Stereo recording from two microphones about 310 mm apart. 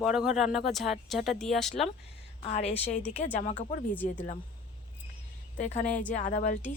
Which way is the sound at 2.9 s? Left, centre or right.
Left.